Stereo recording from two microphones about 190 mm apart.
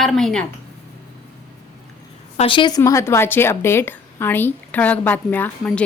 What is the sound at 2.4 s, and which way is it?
A woman's voice, 25° left (ahead or behind).